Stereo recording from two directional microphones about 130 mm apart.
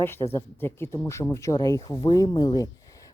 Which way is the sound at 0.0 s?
15° left (ahead or behind).